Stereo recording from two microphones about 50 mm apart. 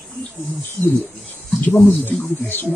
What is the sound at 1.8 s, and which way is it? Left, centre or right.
Speech, left.